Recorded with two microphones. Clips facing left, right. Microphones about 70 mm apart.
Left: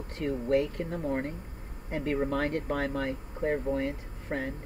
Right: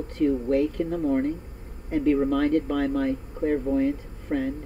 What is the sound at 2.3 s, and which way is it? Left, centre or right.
Speech, left.